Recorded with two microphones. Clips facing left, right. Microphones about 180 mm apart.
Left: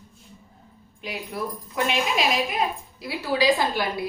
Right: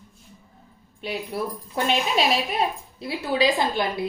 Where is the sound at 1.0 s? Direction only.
30° right (ahead or behind).